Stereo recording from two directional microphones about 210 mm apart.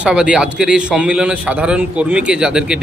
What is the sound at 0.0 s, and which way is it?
A man's voice, 5° right (ahead or behind).